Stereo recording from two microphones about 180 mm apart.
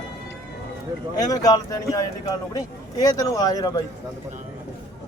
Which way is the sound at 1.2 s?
20° left (ahead or behind).